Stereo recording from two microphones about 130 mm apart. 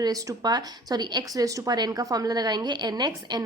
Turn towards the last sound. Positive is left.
turn(degrees=-35)  # may be behind; listen again after turning